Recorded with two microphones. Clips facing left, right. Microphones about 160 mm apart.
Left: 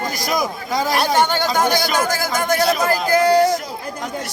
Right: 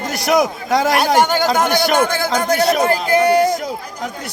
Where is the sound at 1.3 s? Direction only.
55° right (ahead or behind).